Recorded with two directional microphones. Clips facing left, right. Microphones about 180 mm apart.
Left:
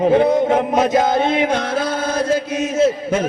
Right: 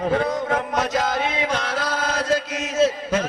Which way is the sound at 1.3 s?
55° left (ahead or behind).